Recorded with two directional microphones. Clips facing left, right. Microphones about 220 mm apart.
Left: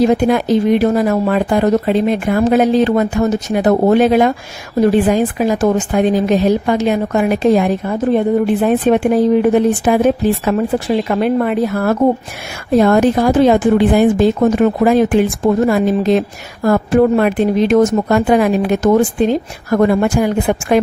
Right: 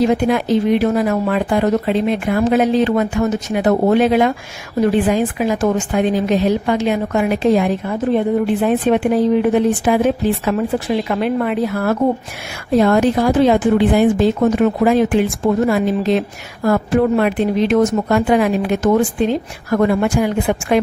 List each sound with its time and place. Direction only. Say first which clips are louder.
0.0 s speech: left 3 dB; 40° left (ahead or behind)